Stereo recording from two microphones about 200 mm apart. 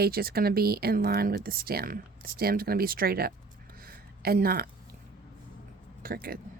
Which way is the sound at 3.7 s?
50° right (ahead or behind).